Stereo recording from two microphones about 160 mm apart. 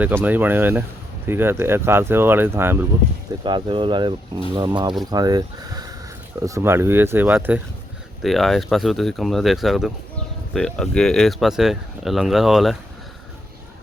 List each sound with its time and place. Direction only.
0.0 s speech: 10° right (ahead or behind)
3.4 s speech: 30° right (ahead or behind); by 7.6 s 10° right (ahead or behind)
8.2 s speech: centre (ahead or behind)